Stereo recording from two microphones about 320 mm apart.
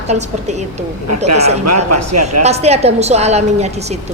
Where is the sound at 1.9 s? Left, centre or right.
Right.